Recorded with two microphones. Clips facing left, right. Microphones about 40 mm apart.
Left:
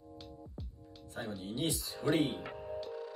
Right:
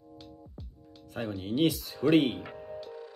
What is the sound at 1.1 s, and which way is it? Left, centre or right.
Speech, right.